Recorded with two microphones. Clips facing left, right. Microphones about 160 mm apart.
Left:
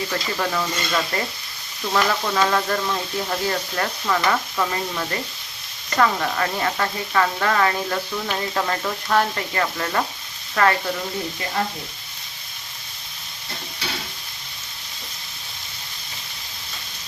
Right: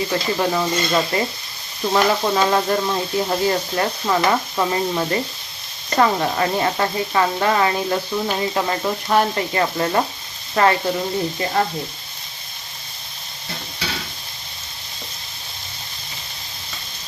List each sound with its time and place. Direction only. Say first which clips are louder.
0.1 s speech: right 5 dB; 20° right (ahead or behind)